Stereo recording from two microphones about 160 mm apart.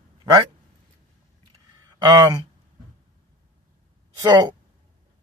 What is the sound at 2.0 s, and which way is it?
Speech, 30° right (ahead or behind).